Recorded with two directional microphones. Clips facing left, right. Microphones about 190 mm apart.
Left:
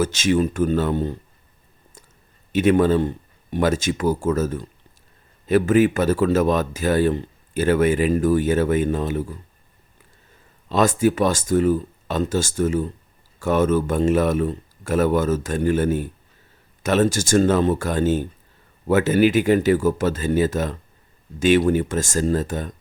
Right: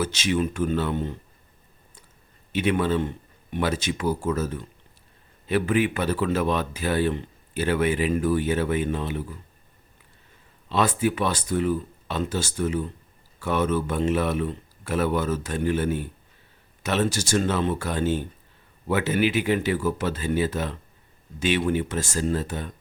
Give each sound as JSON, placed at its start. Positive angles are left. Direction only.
{"t": 0.0, "sound": "speech", "side_deg": 45}
{"t": 2.5, "sound": "speech", "side_deg": 45}
{"t": 10.7, "sound": "speech", "side_deg": 45}